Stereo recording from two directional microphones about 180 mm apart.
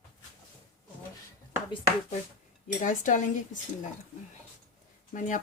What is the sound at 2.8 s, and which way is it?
Speech, 45° left (ahead or behind).